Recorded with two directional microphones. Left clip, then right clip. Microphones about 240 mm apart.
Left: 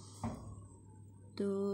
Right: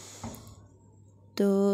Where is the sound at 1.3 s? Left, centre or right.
Right.